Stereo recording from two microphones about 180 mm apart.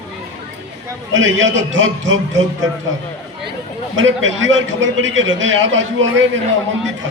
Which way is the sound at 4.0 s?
90° right.